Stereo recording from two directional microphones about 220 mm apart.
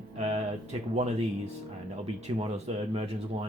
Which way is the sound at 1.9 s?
25° right (ahead or behind).